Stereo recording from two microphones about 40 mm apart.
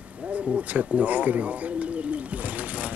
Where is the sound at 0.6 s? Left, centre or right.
Right.